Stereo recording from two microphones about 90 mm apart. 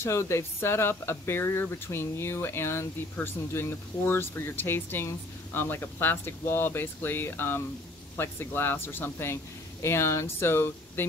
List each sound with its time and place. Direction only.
0.0 s speech: 30° left (ahead or behind)